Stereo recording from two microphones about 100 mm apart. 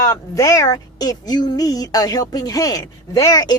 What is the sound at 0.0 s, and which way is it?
Speech, 35° left (ahead or behind).